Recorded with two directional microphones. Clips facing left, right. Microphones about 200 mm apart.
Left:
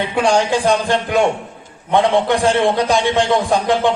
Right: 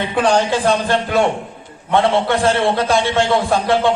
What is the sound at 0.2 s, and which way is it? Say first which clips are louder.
A man's voice: even; 10° left (ahead or behind).